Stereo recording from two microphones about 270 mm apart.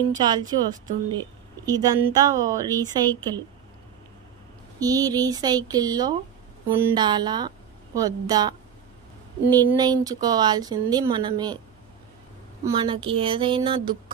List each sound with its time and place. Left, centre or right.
0.2 s speech: centre
4.7 s a woman's voice: centre
12.6 s speech: centre